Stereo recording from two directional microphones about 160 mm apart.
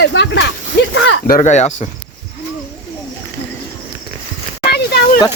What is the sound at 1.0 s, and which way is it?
Speech, 65° left (ahead or behind).